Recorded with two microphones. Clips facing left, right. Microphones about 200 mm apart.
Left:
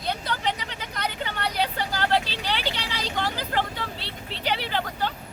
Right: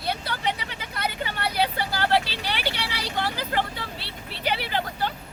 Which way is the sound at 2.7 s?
60° right (ahead or behind).